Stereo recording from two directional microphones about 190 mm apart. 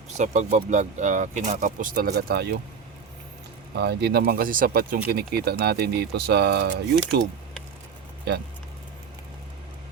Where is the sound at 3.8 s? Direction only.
60° right (ahead or behind).